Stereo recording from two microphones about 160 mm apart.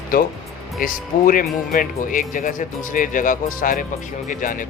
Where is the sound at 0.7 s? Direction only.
60° left (ahead or behind).